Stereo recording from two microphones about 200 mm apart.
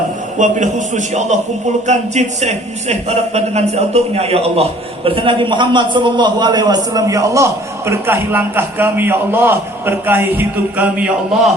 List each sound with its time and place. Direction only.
0.3 s a man's voice: 40° right (ahead or behind); by 11.1 s 5° right (ahead or behind)